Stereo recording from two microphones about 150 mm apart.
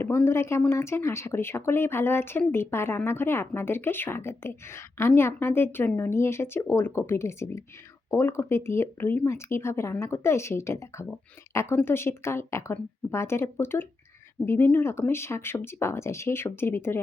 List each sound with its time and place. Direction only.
0.0 s speech: 15° left (ahead or behind)